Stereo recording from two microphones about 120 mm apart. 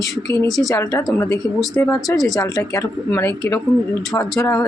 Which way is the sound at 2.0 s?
Centre (ahead or behind).